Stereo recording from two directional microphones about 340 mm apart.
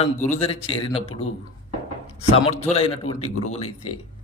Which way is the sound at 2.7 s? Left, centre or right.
Centre.